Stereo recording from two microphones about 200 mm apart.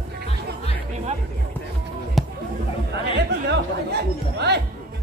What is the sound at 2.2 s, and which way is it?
Music, centre (ahead or behind).